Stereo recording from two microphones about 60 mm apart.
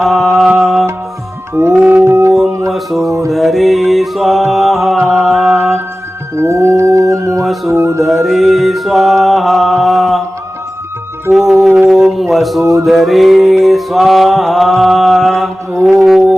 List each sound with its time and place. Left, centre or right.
0.0 s music: centre
1.8 s mantra: centre
2.0 s howl: right
2.6 s mantra: centre
3.1 s music: right
3.3 s music: centre
6.4 s music: right
7.3 s music: centre
7.7 s music: right
8.0 s mantra: centre
11.3 s music: centre
11.9 s a sound: centre
12.8 s music: centre